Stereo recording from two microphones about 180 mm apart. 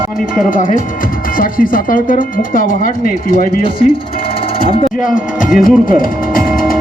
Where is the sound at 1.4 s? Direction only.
50° left (ahead or behind).